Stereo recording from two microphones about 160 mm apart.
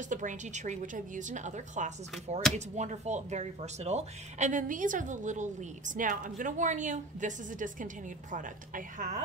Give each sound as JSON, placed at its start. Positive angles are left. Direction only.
{"t": 0.1, "sound": "a woman's voice", "side_deg": -50}